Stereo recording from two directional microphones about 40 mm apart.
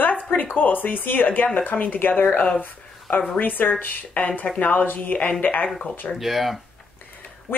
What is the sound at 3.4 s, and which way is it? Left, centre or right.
Speech, left.